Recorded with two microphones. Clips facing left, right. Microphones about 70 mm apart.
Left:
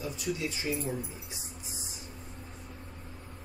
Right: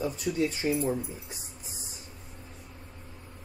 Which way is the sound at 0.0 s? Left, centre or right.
Right.